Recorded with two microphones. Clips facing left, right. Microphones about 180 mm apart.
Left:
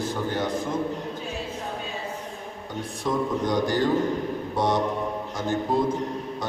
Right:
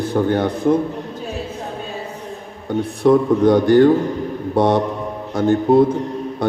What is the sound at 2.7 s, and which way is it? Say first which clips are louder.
A man's voice: right 13 dB; 60° right (ahead or behind).